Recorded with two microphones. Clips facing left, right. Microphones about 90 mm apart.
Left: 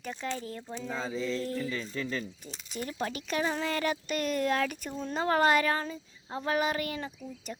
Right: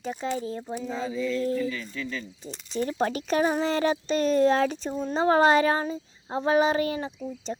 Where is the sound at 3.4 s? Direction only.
20° right (ahead or behind).